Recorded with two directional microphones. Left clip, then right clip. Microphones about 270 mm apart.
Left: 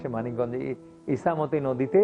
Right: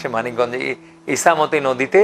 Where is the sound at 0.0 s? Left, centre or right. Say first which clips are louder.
Right 10 dB; centre.